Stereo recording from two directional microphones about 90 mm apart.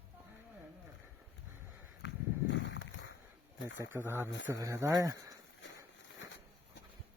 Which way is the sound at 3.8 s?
25° right (ahead or behind).